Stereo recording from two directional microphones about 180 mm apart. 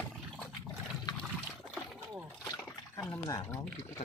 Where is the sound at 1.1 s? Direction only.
25° left (ahead or behind).